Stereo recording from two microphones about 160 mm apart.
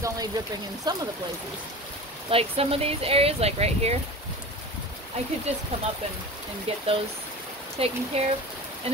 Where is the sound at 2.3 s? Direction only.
35° right (ahead or behind).